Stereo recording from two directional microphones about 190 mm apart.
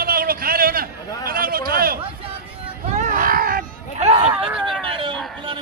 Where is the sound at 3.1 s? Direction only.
45° right (ahead or behind).